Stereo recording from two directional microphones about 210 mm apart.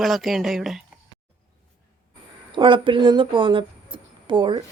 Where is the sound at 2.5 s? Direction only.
25° right (ahead or behind).